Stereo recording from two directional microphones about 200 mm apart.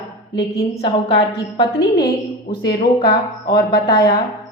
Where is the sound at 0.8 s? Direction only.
30° left (ahead or behind).